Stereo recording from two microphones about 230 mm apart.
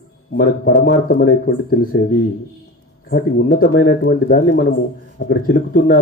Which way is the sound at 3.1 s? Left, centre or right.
Left.